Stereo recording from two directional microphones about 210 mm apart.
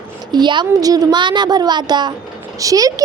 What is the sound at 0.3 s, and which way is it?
A woman's voice, 20° right (ahead or behind).